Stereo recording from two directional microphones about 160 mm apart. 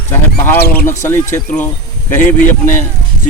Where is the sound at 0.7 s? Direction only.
10° left (ahead or behind).